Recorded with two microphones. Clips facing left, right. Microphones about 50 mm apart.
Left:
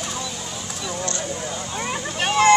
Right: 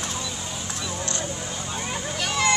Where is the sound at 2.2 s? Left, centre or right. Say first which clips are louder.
Left 8 dB; left.